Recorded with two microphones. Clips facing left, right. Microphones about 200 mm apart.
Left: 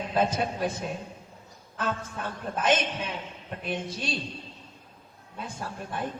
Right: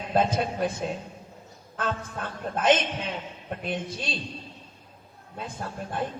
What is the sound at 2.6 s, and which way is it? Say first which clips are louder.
Speech: right 3 dB; 50° left (ahead or behind).